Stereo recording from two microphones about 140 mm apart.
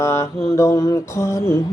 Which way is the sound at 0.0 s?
20° left (ahead or behind).